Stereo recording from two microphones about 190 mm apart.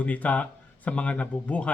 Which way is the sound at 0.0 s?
10° left (ahead or behind).